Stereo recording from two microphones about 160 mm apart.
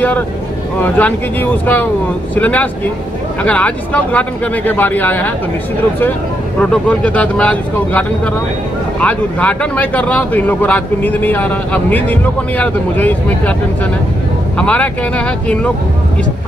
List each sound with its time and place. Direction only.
0.8 s speech: 10° left (ahead or behind)
6.6 s speech: 5° left (ahead or behind)
9.0 s speech: 5° left (ahead or behind)
14.6 s speech: 10° left (ahead or behind)